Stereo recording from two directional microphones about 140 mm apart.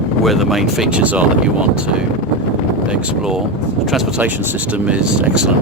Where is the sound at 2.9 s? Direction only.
5° right (ahead or behind).